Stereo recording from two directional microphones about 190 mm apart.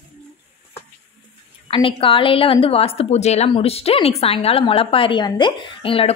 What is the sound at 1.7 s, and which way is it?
A woman's voice, 30° left (ahead or behind).